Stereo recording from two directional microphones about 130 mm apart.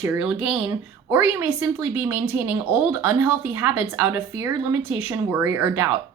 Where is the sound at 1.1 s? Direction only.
20° right (ahead or behind).